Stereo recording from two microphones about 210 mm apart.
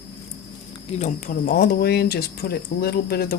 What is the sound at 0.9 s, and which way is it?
Speech, 35° left (ahead or behind).